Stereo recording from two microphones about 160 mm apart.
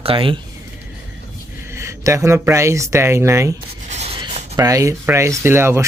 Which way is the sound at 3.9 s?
40° right (ahead or behind).